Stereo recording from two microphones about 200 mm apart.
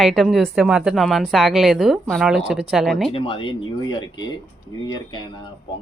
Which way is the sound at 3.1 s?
25° left (ahead or behind).